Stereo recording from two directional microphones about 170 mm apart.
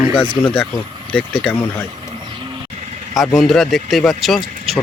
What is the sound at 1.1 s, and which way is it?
Speech, 5° left (ahead or behind).